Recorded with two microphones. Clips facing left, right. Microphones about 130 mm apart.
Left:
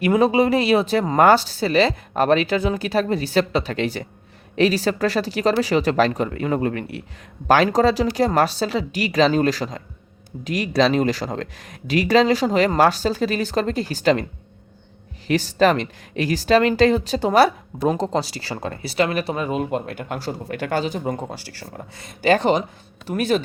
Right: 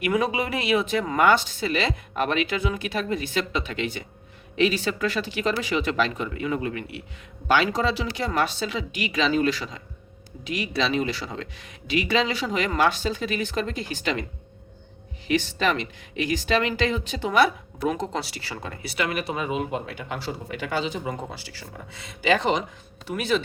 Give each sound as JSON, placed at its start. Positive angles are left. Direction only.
{"t": 0.0, "sound": "speech", "side_deg": 30}
{"t": 15.3, "sound": "speech", "side_deg": 40}